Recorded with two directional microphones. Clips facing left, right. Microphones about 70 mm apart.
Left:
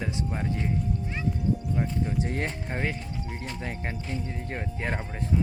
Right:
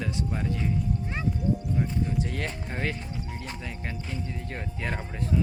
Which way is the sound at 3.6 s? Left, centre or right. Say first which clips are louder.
Left 2 dB; left.